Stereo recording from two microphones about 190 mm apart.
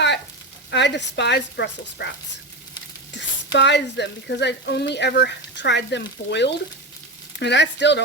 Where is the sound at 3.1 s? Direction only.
70° left (ahead or behind).